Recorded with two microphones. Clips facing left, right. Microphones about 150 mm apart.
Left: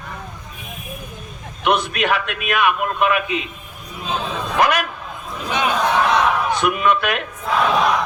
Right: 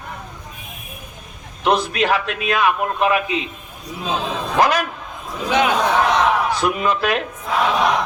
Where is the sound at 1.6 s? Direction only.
30° right (ahead or behind).